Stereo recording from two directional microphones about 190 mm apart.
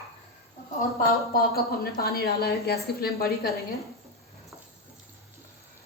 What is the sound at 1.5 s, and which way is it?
A woman's voice, 55° left (ahead or behind).